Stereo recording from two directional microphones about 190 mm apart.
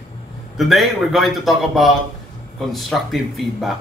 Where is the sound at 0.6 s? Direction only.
Centre (ahead or behind).